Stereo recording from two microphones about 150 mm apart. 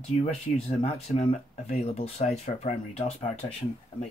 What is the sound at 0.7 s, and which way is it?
Speech, 45° left (ahead or behind).